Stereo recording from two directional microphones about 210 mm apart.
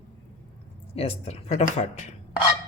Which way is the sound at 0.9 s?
30° left (ahead or behind).